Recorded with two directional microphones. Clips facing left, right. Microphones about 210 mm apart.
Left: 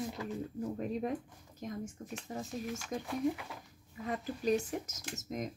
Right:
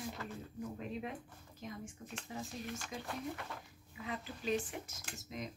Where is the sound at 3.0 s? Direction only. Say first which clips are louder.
Left 10 dB; 5° left (ahead or behind).